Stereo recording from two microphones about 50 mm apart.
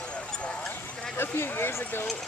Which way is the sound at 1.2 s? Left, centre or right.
Left.